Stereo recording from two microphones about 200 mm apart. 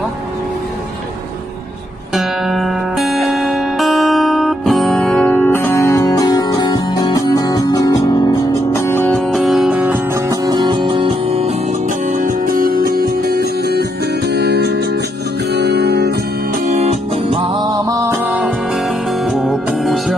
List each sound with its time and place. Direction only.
2.1 s music: centre (ahead or behind); by 11.5 s 30° right (ahead or behind)
12.1 s music: 40° right (ahead or behind)
16.6 s music: 35° right (ahead or behind)
17.8 s music: 15° right (ahead or behind)